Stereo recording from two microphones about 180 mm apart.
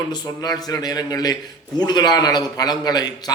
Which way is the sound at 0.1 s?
20° left (ahead or behind).